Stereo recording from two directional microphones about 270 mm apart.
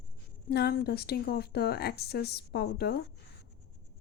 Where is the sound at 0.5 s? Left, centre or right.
Left.